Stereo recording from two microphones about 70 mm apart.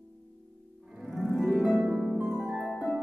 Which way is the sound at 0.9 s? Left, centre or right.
Centre.